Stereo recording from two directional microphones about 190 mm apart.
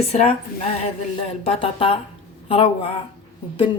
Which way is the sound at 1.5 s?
30° left (ahead or behind).